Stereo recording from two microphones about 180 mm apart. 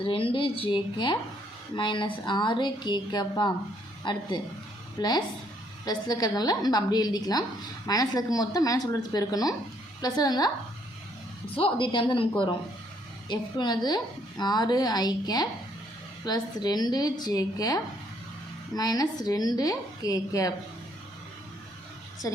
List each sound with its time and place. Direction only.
0.0 s a woman's voice: 30° left (ahead or behind)
11.5 s a woman's voice: 30° left (ahead or behind)